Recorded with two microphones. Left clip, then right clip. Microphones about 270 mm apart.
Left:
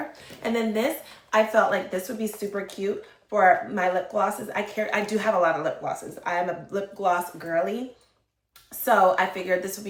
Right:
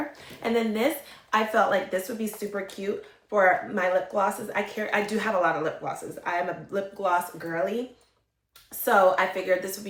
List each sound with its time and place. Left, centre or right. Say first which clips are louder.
0.4 s speech: even; centre
8.8 s speech: left 1 dB; centre